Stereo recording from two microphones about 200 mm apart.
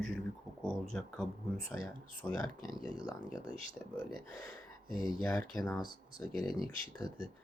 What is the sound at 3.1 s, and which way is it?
Speech, 20° left (ahead or behind).